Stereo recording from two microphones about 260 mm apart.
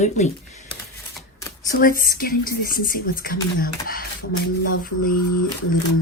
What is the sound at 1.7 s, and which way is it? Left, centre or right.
Speech, left.